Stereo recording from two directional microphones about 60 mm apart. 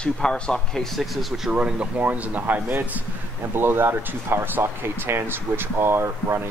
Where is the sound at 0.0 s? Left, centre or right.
Centre.